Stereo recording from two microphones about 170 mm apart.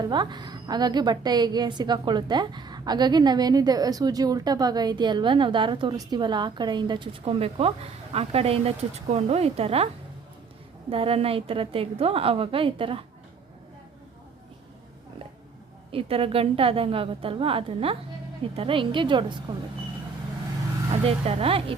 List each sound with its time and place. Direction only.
0.0 s a woman's voice: 25° right (ahead or behind)
15.9 s a woman's voice: 35° right (ahead or behind)
21.0 s a woman's voice: 35° right (ahead or behind)